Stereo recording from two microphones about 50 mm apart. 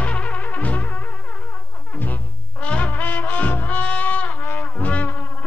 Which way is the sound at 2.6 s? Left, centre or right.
Left.